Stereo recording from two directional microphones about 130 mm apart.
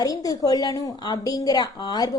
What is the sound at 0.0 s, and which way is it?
A woman's voice, 30° left (ahead or behind).